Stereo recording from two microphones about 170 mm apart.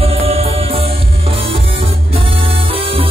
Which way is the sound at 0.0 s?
35° right (ahead or behind).